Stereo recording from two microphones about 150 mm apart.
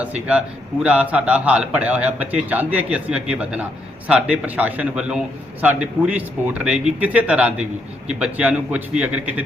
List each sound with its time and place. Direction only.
0.0 s speech: 10° right (ahead or behind)